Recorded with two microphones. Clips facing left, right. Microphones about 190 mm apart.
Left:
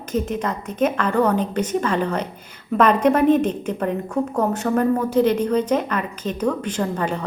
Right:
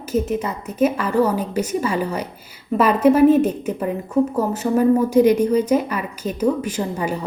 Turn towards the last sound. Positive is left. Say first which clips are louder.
# even
turn(degrees=-10)  # may be behind; listen again after turning